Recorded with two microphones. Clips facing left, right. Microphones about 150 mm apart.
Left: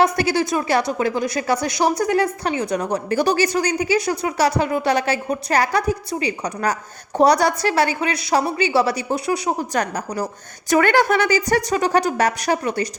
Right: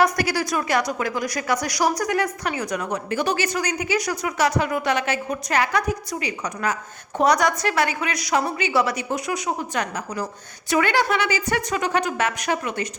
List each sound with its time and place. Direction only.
0.0 s a woman's voice: 25° left (ahead or behind)